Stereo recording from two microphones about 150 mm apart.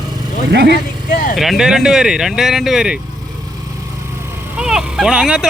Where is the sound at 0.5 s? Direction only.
90° right.